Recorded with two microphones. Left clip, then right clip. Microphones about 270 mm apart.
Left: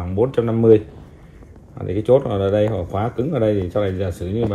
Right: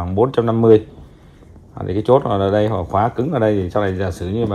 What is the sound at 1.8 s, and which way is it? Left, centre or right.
Speech, right.